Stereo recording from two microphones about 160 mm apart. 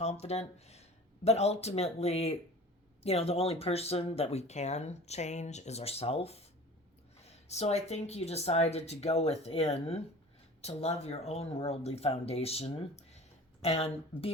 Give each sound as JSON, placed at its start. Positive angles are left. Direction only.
{"t": 0.0, "sound": "speech", "side_deg": 40}